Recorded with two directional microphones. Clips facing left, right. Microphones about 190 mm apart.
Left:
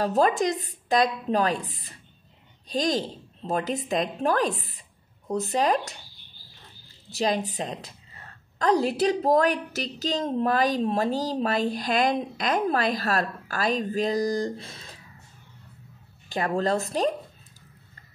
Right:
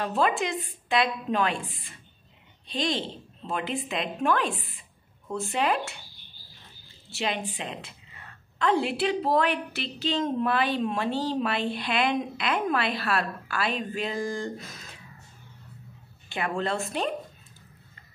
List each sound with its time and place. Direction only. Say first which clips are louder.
0.0 s a woman's voice: left 4 dB; 40° left (ahead or behind)
7.1 s a woman's voice: left 5 dB; 35° left (ahead or behind)
16.3 s a woman's voice: left 4 dB; 40° left (ahead or behind)